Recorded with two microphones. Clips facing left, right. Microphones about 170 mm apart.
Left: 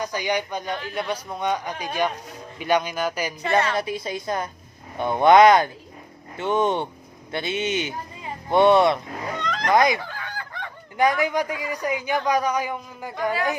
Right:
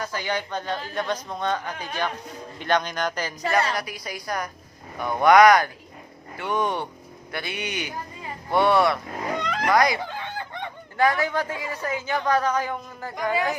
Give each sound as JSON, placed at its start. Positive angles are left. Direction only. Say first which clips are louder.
{"t": 0.0, "sound": "a man's voice", "louder": "left 3 dB", "side_deg": 15}
{"t": 3.7, "sound": "a woman's voice", "louder": "left 5 dB", "side_deg": 25}
{"t": 9.4, "sound": "a sound", "louder": "right 1 dB", "side_deg": -10}
{"t": 9.7, "sound": "a woman's voice", "louder": "left 2 dB", "side_deg": 20}
{"t": 10.0, "sound": "goose", "louder": "right 3 dB", "side_deg": -25}
{"t": 10.9, "sound": "a man's voice", "louder": "left 2 dB", "side_deg": 15}